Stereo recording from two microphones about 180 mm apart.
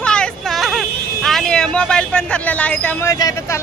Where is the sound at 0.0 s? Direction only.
5° left (ahead or behind).